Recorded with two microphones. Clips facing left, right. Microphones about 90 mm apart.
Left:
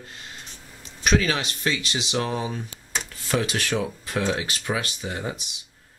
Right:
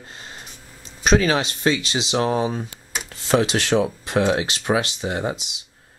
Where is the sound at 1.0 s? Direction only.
30° right (ahead or behind).